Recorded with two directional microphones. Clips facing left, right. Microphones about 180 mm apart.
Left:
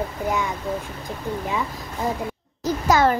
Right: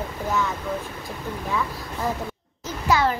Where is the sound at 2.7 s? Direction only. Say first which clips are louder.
Left 4 dB; 45° left (ahead or behind).